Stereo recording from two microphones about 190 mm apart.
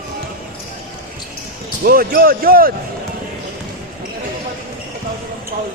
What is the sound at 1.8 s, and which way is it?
Speech, 50° right (ahead or behind).